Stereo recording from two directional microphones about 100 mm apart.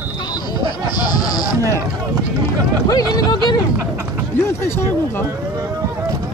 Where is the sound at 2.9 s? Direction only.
40° left (ahead or behind).